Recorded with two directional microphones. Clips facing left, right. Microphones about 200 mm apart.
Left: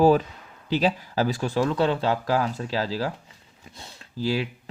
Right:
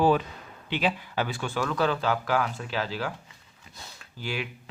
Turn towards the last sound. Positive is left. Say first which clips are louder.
# left 8 dB
turn(degrees=35)  # may be behind; listen again after turning